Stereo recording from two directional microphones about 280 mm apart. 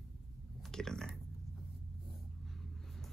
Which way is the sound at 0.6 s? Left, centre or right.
Centre.